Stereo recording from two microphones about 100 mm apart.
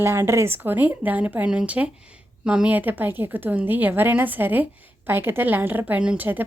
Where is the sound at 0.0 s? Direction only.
25° right (ahead or behind).